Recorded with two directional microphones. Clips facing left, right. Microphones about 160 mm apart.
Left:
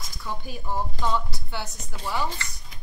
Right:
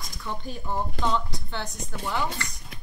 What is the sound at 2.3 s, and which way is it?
Chopping, 60° right (ahead or behind).